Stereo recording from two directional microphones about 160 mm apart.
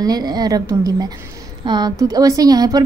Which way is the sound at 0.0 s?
25° right (ahead or behind).